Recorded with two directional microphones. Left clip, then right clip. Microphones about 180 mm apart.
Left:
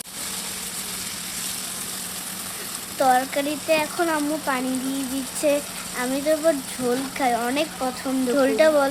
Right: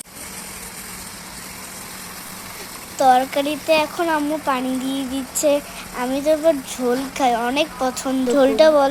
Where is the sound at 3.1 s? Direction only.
20° right (ahead or behind).